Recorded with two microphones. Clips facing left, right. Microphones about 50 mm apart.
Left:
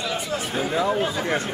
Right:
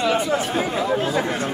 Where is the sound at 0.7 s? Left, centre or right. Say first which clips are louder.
Left 3 dB; centre.